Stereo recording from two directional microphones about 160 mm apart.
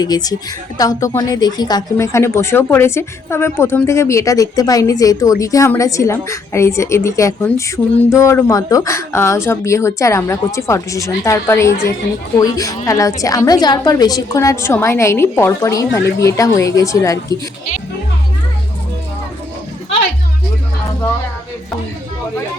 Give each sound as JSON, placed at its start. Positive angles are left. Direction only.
{"t": 0.0, "sound": "a woman's voice", "side_deg": 25}